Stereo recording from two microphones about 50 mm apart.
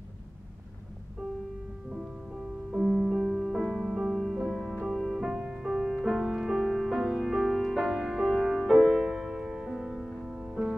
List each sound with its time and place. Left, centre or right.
2.7 s music: centre
4.6 s music: centre
4.8 s music: centre
10.5 s music: centre